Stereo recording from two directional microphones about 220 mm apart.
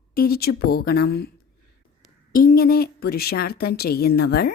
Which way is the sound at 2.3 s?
40° left (ahead or behind).